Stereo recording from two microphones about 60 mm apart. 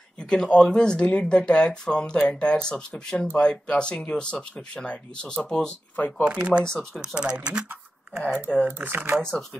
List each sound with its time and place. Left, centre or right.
0.3 s speech: centre
5.9 s speech: left
6.2 s speech: centre
6.6 s speech: centre
7.2 s speech: centre
8.6 s speech: right